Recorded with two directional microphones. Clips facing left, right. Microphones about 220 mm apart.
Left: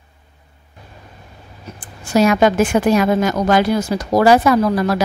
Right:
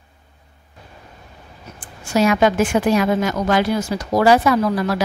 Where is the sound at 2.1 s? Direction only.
40° left (ahead or behind).